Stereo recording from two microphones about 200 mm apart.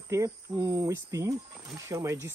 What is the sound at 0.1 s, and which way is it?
Speech, 15° right (ahead or behind).